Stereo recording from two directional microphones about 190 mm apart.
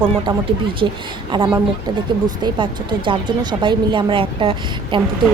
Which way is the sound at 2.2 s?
20° right (ahead or behind).